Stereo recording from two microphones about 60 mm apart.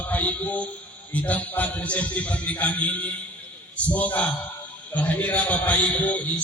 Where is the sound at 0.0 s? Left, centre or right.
Left.